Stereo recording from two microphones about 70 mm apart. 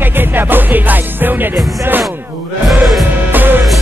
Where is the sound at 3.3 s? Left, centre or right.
Right.